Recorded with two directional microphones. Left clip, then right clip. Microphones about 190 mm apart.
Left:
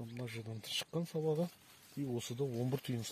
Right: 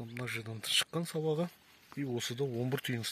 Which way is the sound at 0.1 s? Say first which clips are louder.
Right 10 dB; centre (ahead or behind).